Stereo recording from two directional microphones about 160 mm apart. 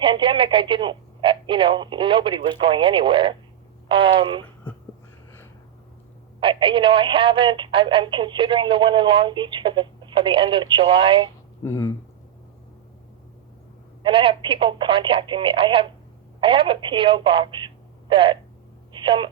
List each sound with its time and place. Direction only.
0.0 s speech: 30° right (ahead or behind)
6.4 s speech: 35° right (ahead or behind)
11.6 s speech: 15° left (ahead or behind)
14.0 s speech: 35° right (ahead or behind)